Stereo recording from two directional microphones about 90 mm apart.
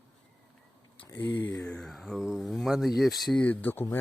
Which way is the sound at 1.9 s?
5° left (ahead or behind).